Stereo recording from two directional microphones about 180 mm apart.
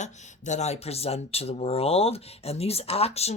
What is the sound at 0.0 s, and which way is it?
Speech, 40° left (ahead or behind).